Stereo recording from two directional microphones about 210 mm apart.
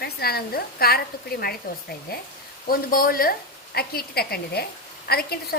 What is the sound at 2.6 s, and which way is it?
A woman's voice, 45° left (ahead or behind).